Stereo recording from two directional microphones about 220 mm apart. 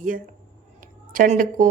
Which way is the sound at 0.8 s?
40° right (ahead or behind).